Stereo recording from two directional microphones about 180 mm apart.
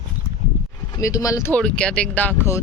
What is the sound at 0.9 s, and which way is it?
Speech, 20° left (ahead or behind).